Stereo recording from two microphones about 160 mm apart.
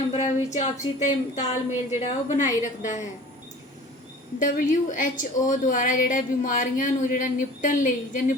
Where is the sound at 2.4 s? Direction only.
50° left (ahead or behind).